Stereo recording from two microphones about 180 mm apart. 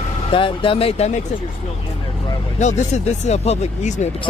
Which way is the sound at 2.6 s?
40° left (ahead or behind).